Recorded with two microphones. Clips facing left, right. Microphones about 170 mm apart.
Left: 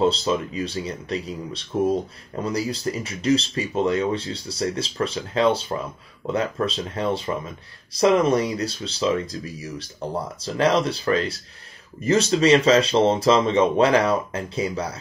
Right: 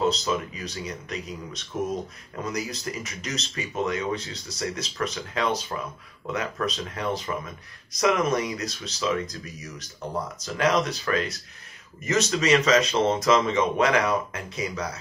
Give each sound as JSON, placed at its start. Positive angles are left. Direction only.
{"t": 0.0, "sound": "speech", "side_deg": 30}